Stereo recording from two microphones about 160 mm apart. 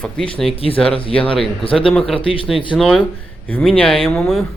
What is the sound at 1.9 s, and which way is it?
Speech, 5° left (ahead or behind).